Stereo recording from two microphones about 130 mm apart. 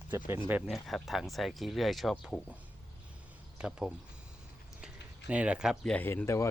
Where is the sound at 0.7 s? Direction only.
Centre (ahead or behind).